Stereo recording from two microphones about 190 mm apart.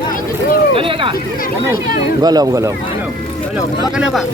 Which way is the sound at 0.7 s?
30° right (ahead or behind).